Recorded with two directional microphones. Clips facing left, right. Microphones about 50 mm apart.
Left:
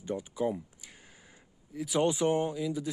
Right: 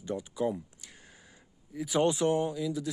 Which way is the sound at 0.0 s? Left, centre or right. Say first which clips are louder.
Even; centre.